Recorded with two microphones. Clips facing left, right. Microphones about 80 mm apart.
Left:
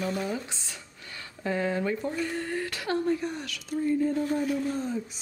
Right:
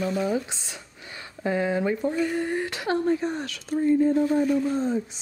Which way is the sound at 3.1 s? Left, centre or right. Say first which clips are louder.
Right 4 dB; right.